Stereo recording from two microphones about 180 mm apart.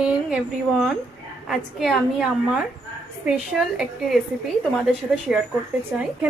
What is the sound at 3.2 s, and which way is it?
A woman's voice, centre (ahead or behind).